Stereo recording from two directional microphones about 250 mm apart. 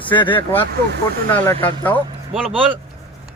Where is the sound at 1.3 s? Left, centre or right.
Centre.